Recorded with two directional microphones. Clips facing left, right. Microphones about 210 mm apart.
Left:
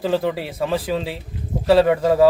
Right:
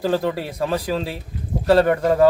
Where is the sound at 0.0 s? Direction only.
Centre (ahead or behind).